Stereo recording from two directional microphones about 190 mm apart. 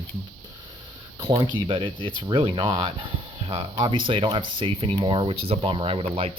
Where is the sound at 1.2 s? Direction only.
25° right (ahead or behind).